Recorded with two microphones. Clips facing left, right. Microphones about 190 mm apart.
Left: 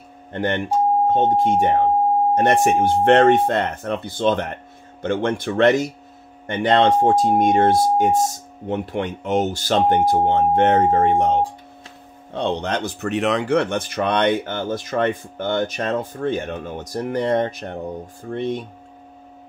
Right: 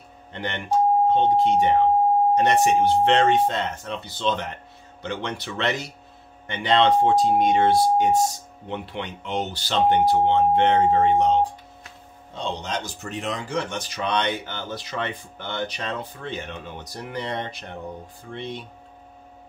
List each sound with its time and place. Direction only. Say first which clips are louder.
0.3 s speech: left 4 dB; 50° left (ahead or behind)
12.3 s speech: left 7 dB; 60° left (ahead or behind); by 18.7 s 45° left (ahead or behind)